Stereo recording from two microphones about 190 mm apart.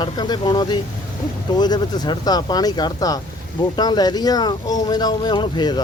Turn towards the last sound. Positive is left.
turn(degrees=25)  # may be behind; listen again after turning